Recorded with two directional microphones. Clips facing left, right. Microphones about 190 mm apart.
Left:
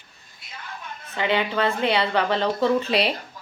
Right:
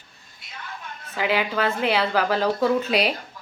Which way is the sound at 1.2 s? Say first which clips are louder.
Even; 5° right (ahead or behind).